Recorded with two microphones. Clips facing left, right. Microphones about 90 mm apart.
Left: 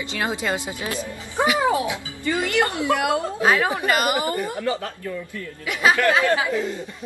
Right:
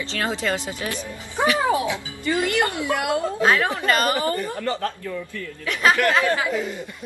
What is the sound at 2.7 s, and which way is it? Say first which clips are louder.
A man's voice: left 2 dB; 20° left (ahead or behind).